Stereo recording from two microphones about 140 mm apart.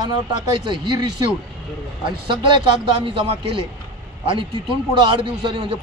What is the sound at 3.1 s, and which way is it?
Speech, 40° right (ahead or behind).